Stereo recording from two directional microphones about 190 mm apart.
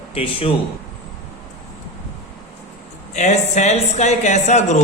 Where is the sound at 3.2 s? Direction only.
40° left (ahead or behind).